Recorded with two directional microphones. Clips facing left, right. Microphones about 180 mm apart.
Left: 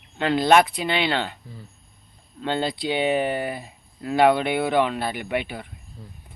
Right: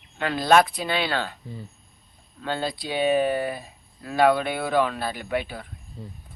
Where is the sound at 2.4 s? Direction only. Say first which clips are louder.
Left 3 dB; 25° left (ahead or behind).